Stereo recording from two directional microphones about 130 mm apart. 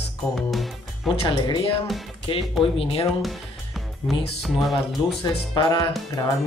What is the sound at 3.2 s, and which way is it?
Music, centre (ahead or behind).